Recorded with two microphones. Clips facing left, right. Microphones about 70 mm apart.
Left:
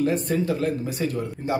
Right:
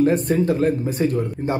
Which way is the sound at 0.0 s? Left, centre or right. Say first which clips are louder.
Right 5 dB; right.